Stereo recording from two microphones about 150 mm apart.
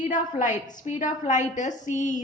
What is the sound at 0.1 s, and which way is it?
A woman's voice, 55° left (ahead or behind).